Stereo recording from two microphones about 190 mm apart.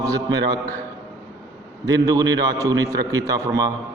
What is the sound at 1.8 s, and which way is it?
A man's voice, 20° right (ahead or behind).